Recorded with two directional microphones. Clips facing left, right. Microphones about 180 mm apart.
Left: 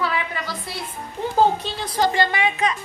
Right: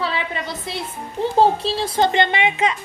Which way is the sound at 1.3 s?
30° right (ahead or behind).